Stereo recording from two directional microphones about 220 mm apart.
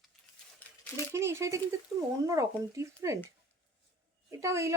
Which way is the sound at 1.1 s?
10° right (ahead or behind).